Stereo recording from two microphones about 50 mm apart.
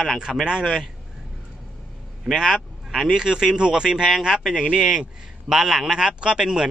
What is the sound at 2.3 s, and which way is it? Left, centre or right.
Speech, centre.